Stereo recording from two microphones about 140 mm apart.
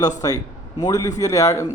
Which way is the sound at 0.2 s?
25° left (ahead or behind).